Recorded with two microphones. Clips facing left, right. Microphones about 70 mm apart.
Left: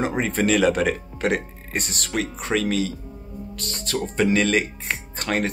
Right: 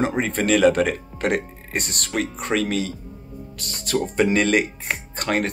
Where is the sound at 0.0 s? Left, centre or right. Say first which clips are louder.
Even; centre.